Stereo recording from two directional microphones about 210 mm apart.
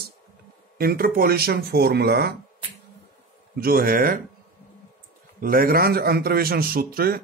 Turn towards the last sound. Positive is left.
turn(degrees=-45)  # may be behind; listen again after turning